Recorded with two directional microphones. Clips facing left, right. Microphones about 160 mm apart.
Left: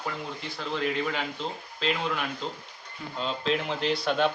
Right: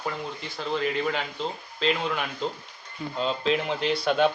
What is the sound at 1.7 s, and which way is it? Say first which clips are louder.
A man's voice: right 3 dB; centre (ahead or behind).